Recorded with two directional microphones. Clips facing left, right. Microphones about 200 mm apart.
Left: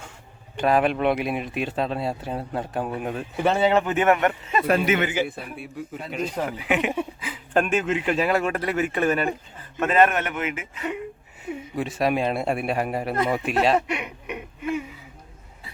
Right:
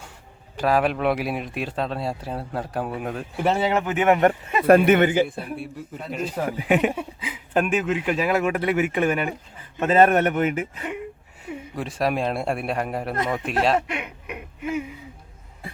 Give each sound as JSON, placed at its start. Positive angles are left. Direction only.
{"t": 0.5, "sound": "speech", "side_deg": 0}
{"t": 4.6, "sound": "speech", "side_deg": -55}
{"t": 5.2, "sound": "speech", "side_deg": 0}
{"t": 6.6, "sound": "a man's voice", "side_deg": -40}
{"t": 6.9, "sound": "speech", "side_deg": -5}
{"t": 9.8, "sound": "a man's voice", "side_deg": -35}
{"t": 11.7, "sound": "speech", "side_deg": 0}